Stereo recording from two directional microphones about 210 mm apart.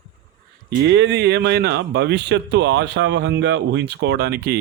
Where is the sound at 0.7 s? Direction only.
55° right (ahead or behind).